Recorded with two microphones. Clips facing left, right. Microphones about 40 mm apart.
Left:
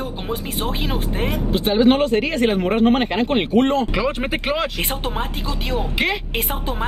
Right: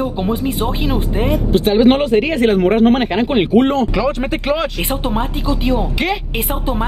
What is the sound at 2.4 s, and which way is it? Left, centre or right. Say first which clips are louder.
Speech: right 5 dB; centre.